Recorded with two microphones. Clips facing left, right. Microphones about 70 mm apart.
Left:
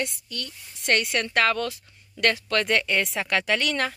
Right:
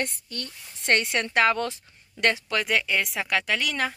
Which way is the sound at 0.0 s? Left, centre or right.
Right.